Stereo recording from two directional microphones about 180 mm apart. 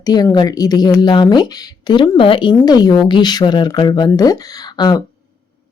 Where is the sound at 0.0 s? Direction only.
20° left (ahead or behind).